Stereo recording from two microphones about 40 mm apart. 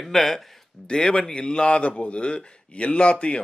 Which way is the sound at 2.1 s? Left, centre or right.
Left.